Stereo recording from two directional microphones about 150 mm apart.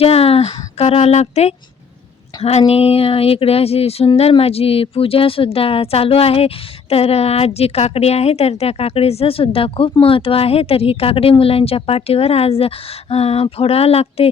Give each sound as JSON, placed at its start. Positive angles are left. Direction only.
{"t": 0.0, "sound": "a woman's voice", "side_deg": 40}